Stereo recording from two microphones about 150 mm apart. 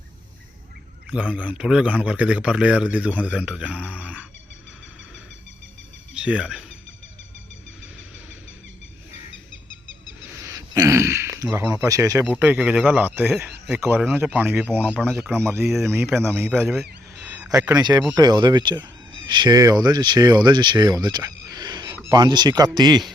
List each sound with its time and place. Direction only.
1.1 s a man's voice: 10° right (ahead or behind)
6.1 s speech: 5° right (ahead or behind)
10.4 s a man's voice: 20° right (ahead or behind)
15.0 s speech: 5° left (ahead or behind)
15.4 s a man's voice: 15° right (ahead or behind)
16.5 s speech: centre (ahead or behind)
17.2 s a sound: 10° right (ahead or behind)
17.7 s speech: 25° right (ahead or behind)